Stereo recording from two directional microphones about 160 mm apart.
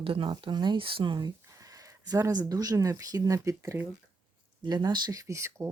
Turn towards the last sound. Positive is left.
turn(degrees=-15)  # may be behind; listen again after turning